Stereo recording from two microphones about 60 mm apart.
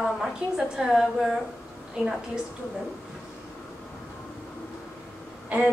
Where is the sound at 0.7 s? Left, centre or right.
Centre.